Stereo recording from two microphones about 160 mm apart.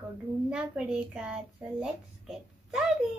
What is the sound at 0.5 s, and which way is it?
A child's voice, 5° right (ahead or behind).